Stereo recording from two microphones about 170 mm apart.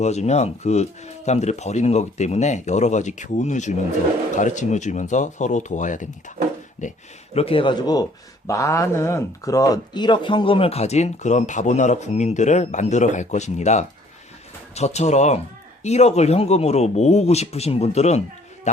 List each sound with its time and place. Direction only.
0.0 s speech: 40° left (ahead or behind)
7.3 s a man's voice: 35° left (ahead or behind)